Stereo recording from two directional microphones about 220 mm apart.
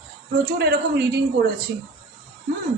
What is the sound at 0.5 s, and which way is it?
Speech, 50° right (ahead or behind).